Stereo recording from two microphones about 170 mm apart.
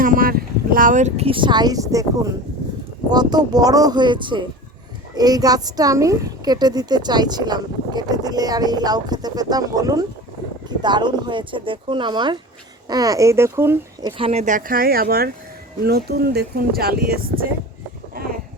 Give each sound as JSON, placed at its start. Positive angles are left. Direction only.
{"t": 0.0, "sound": "speech", "side_deg": -55}
{"t": 3.1, "sound": "a woman's voice", "side_deg": -25}
{"t": 14.1, "sound": "speech", "side_deg": -35}